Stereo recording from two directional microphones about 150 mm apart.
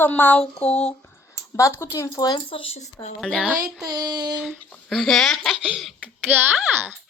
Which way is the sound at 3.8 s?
30° right (ahead or behind).